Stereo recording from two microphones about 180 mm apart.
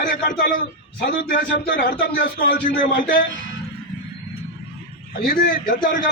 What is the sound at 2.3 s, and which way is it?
Speech, 50° left (ahead or behind).